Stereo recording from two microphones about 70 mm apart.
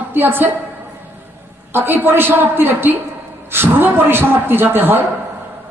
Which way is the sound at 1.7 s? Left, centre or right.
Right.